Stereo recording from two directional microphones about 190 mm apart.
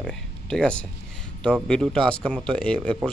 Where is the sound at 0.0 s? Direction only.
5° left (ahead or behind).